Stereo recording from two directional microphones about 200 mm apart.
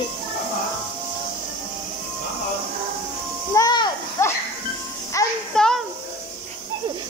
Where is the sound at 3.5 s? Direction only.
20° left (ahead or behind).